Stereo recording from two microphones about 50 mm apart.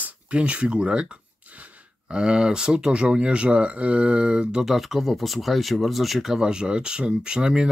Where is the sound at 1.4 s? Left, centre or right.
Right.